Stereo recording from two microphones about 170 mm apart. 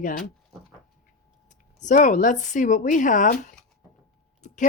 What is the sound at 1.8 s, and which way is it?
Speech, 50° left (ahead or behind).